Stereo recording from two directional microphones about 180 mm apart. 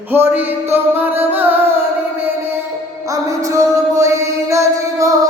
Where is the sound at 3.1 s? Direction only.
20° right (ahead or behind).